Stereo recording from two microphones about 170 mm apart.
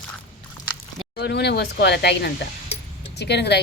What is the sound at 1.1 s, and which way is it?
A woman's voice, 80° left.